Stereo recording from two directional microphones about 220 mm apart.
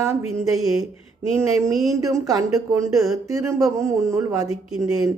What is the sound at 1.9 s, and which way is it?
Speech, 15° right (ahead or behind).